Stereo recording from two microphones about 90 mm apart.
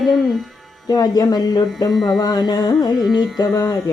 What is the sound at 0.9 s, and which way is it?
Speech, 45° left (ahead or behind).